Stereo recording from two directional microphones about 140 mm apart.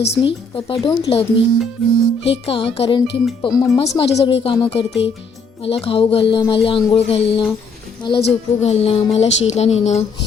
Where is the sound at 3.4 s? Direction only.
25° left (ahead or behind).